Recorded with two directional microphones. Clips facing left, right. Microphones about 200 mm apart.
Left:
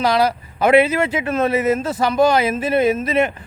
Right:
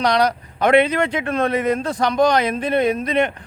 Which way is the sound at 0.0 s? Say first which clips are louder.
Left 1 dB; 5° left (ahead or behind).